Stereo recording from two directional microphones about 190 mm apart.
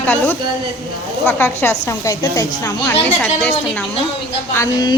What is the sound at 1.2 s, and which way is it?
A woman's voice, 10° left (ahead or behind).